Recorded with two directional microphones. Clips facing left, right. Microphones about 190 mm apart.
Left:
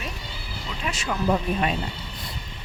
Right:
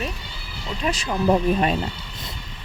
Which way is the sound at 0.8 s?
35° right (ahead or behind).